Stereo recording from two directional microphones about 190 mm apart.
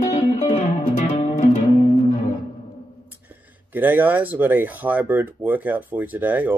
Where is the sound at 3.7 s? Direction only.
10° right (ahead or behind).